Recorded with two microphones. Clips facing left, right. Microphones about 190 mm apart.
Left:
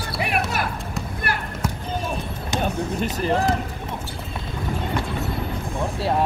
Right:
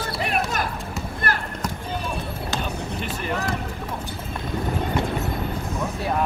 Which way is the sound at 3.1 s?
35° left (ahead or behind).